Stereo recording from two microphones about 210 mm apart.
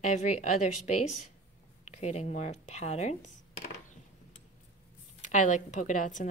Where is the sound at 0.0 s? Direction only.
35° left (ahead or behind).